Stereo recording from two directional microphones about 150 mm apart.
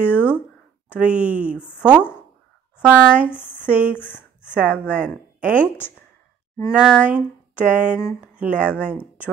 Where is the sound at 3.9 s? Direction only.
15° left (ahead or behind).